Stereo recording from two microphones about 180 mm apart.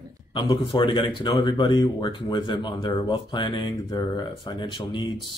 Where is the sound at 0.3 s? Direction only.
25° left (ahead or behind).